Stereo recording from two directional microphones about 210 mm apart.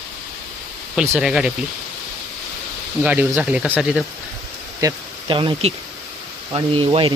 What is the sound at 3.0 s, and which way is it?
Speech, 5° right (ahead or behind).